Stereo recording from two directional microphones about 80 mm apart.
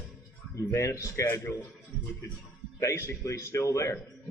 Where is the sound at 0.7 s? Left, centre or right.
Left.